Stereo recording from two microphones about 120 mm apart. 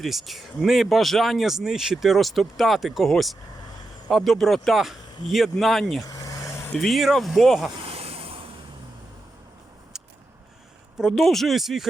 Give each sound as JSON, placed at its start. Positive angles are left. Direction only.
{"t": 0.0, "sound": "speech", "side_deg": 0}
{"t": 6.1, "sound": "vehicle", "side_deg": 30}
{"t": 6.7, "sound": "speech", "side_deg": 0}
{"t": 7.8, "sound": "a sound", "side_deg": -55}
{"t": 10.9, "sound": "speech", "side_deg": 0}